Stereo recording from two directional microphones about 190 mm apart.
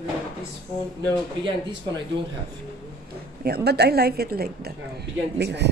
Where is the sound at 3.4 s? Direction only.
55° right (ahead or behind).